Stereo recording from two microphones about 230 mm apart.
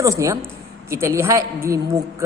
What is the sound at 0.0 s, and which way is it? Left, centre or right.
A woman's voice, centre.